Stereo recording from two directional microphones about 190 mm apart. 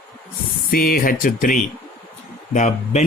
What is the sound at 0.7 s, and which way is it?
Speech, 50° left (ahead or behind).